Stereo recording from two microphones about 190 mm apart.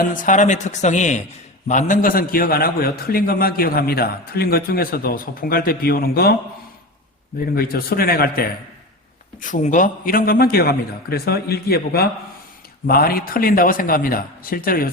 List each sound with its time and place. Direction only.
0.0 s a man's voice: 45° left (ahead or behind)
7.5 s a man's voice: 50° left (ahead or behind)
9.4 s a man's voice: 40° left (ahead or behind)